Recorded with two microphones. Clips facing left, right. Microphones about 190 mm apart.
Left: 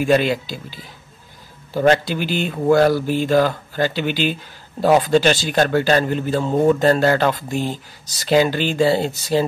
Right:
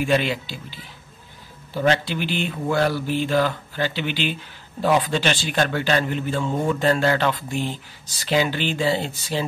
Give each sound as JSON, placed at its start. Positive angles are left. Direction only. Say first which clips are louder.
{"t": 0.0, "sound": "speech", "louder": "left 5 dB", "side_deg": 40}